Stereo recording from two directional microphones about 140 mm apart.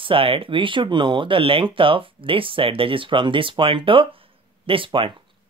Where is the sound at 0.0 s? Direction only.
40° right (ahead or behind).